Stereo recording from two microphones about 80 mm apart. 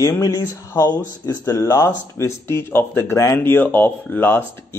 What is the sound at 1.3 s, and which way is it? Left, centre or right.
Speech, left.